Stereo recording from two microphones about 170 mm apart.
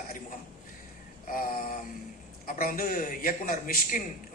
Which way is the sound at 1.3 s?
55° left (ahead or behind).